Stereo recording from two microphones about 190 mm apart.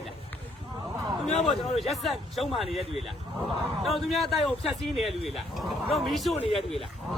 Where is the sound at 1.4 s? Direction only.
Centre (ahead or behind).